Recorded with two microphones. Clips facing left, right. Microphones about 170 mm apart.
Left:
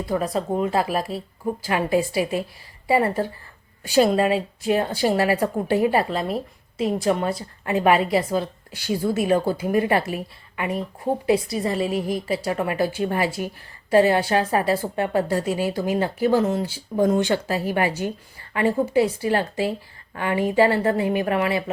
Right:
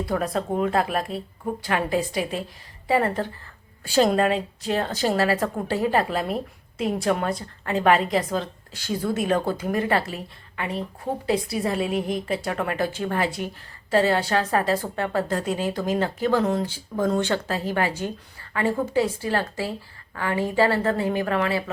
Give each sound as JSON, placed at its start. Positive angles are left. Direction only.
{"t": 0.0, "sound": "a woman's voice", "side_deg": 0}
{"t": 6.1, "sound": "a woman's voice", "side_deg": 0}
{"t": 7.6, "sound": "a woman's voice", "side_deg": 15}
{"t": 11.4, "sound": "a woman's voice", "side_deg": 0}